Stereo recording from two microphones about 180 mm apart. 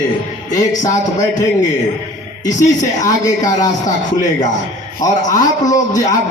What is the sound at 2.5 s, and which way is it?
Speech, 45° left (ahead or behind).